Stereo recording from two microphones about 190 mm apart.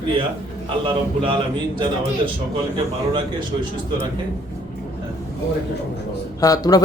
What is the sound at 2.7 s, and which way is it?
Speech, 25° right (ahead or behind).